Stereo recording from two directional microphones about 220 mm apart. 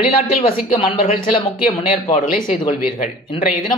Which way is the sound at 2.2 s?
40° left (ahead or behind).